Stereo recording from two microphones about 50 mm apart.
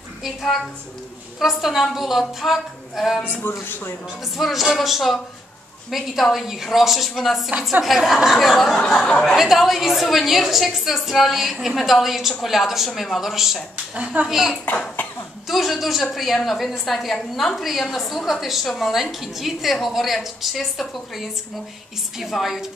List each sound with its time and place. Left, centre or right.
0.2 s a woman's voice: centre
3.3 s speech: left
4.4 s a woman's voice: centre
22.3 s a woman's voice: centre